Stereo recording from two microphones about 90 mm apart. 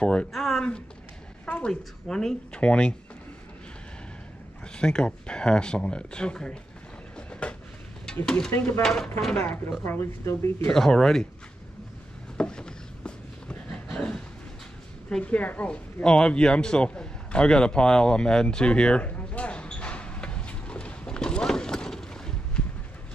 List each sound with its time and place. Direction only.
0.0 s speech: 10° left (ahead or behind)
4.7 s speech: 10° left (ahead or behind)
7.2 s train: 15° left (ahead or behind)
8.3 s speech: 10° left (ahead or behind)
9.8 s speech: 30° left (ahead or behind)
10.7 s speech: 5° left (ahead or behind)
12.4 s a sound: 10° left (ahead or behind)